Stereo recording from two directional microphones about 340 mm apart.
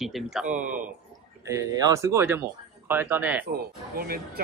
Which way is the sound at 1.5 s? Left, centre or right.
Centre.